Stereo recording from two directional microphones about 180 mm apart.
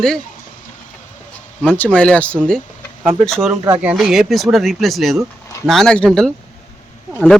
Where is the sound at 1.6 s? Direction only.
10° left (ahead or behind).